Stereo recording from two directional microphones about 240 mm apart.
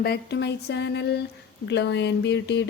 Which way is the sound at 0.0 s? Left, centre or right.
Left.